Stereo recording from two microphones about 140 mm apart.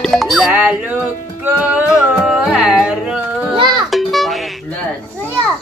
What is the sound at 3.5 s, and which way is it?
Music, 30° right (ahead or behind).